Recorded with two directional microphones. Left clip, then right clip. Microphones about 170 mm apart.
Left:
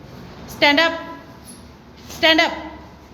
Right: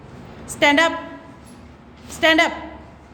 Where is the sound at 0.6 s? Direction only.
20° right (ahead or behind).